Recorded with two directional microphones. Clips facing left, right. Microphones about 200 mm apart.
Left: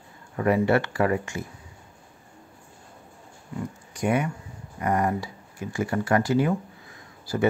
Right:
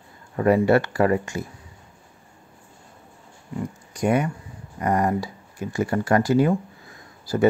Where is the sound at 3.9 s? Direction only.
40° right (ahead or behind).